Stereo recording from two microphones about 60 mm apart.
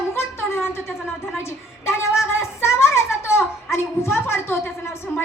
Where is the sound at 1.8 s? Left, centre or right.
Left.